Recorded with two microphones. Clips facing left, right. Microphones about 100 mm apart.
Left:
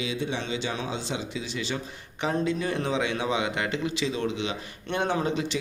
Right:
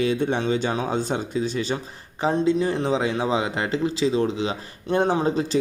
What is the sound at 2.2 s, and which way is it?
Speech, 30° right (ahead or behind).